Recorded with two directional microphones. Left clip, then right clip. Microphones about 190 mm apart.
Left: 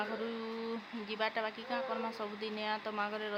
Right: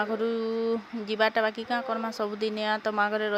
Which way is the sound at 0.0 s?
35° right (ahead or behind).